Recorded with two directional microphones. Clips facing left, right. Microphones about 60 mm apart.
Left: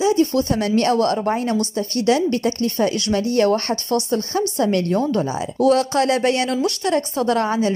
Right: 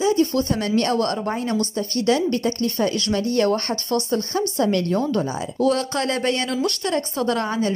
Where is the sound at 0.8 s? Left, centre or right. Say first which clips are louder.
Left 4 dB; left.